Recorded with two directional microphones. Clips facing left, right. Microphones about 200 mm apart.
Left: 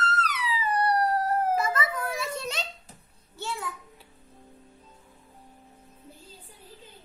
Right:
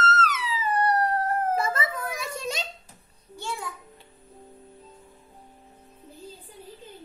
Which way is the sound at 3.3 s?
15° right (ahead or behind).